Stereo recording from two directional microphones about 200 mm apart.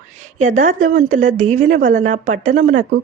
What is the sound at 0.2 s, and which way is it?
Speech, 40° right (ahead or behind).